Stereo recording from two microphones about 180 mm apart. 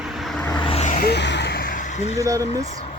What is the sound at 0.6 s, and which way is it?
Vehicle, 35° left (ahead or behind).